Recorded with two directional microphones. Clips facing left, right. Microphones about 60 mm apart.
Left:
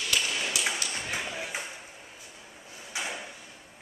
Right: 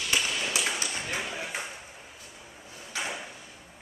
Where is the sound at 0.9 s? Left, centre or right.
Centre.